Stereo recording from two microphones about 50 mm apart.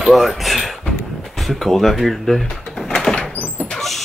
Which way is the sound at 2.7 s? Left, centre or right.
Centre.